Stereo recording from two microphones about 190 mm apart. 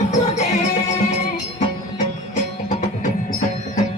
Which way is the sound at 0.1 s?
40° left (ahead or behind).